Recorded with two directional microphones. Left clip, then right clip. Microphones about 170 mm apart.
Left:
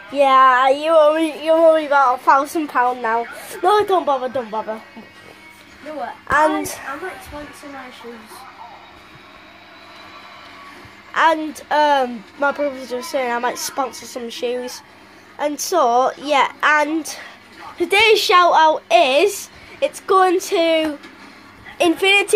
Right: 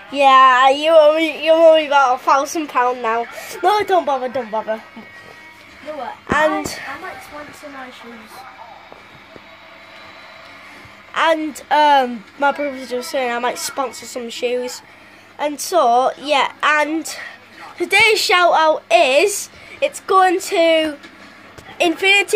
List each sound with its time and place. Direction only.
0.1 s speech: 5° right (ahead or behind)
6.3 s speech: centre (ahead or behind)
11.1 s a sound: centre (ahead or behind)
11.5 s speech: 15° right (ahead or behind)